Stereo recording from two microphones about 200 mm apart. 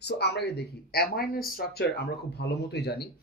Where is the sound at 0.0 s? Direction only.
55° left (ahead or behind).